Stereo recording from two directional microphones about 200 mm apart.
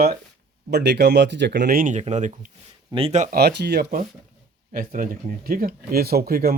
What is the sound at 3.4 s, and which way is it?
Speech, 55° right (ahead or behind).